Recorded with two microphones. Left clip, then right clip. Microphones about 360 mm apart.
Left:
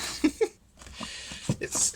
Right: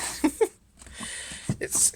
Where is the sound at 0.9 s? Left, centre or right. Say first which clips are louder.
Right 1 dB; centre.